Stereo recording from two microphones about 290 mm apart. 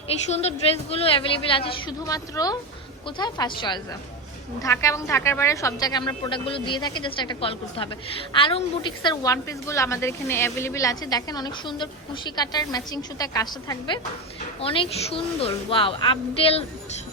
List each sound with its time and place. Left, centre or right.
0.3 s a woman's voice: left